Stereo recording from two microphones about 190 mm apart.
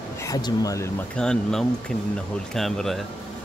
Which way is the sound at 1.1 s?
5° left (ahead or behind).